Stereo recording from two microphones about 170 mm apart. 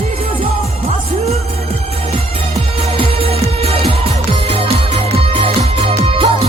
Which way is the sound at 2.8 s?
35° right (ahead or behind).